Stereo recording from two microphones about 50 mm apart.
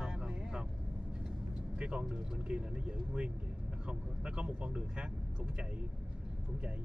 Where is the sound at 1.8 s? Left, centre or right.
Right.